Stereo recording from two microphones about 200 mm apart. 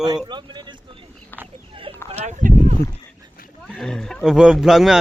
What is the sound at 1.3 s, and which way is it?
Speech, 10° left (ahead or behind).